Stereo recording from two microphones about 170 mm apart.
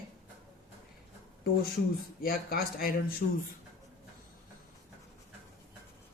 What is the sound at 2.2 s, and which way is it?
Speech, 60° left (ahead or behind).